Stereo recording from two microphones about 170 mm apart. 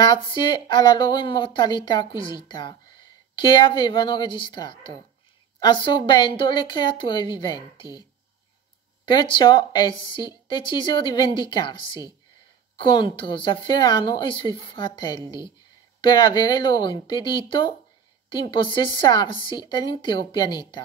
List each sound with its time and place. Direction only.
0.0 s speech: 25° left (ahead or behind)
9.0 s speech: 30° left (ahead or behind)
12.7 s speech: 30° left (ahead or behind)